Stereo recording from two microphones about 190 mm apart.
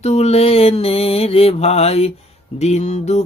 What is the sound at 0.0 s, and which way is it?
Mantra, 35° left (ahead or behind).